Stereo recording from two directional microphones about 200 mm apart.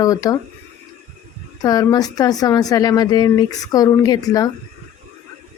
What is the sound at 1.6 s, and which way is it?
Speech, 20° left (ahead or behind).